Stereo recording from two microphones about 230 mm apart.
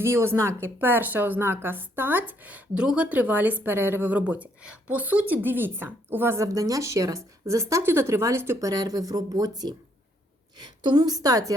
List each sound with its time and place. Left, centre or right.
0.0 s a woman's voice: centre